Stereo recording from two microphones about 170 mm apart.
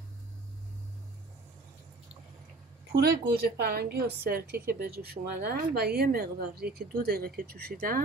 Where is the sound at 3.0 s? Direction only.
65° right (ahead or behind).